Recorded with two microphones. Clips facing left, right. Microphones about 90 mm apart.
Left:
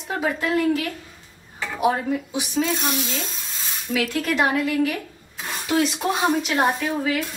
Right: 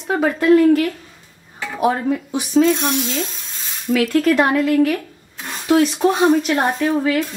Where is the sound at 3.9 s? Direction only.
55° right (ahead or behind).